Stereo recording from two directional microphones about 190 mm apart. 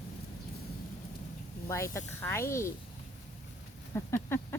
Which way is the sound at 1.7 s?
15° left (ahead or behind).